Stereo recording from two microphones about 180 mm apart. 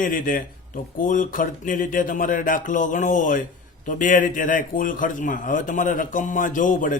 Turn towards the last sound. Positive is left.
turn(degrees=45)  # may be behind; listen again after turning